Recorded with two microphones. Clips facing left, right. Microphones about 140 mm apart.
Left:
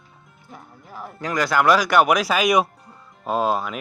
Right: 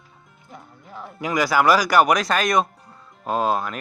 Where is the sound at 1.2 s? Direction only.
5° right (ahead or behind).